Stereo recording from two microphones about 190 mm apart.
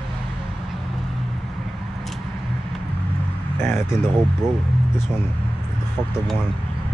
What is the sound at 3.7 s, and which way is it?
Crow, 5° right (ahead or behind).